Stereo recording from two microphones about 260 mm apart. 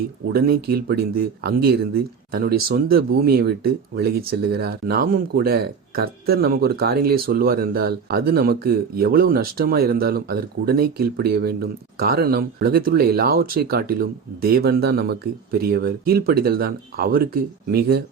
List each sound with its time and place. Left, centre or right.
0.3 s speech: right